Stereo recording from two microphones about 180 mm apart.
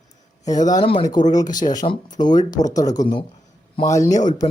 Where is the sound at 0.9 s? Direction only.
25° left (ahead or behind).